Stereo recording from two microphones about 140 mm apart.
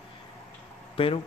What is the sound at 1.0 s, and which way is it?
Speech, 40° left (ahead or behind).